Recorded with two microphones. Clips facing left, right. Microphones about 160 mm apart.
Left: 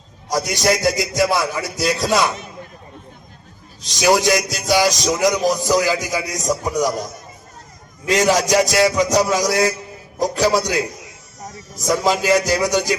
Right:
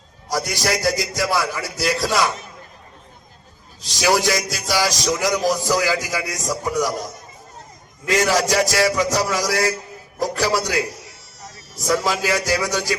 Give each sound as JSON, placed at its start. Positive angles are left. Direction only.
{"t": 0.3, "sound": "a man's voice", "side_deg": 20}
{"t": 3.8, "sound": "a man's voice", "side_deg": 20}
{"t": 8.0, "sound": "a man's voice", "side_deg": 20}
{"t": 11.9, "sound": "a man's voice", "side_deg": 20}